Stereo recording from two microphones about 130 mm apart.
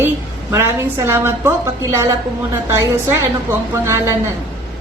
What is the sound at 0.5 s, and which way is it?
A woman's voice, 20° right (ahead or behind).